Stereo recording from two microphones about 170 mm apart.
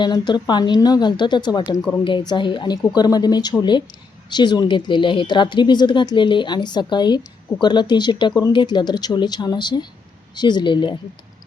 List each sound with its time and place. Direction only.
0.0 s a woman's voice: 25° left (ahead or behind)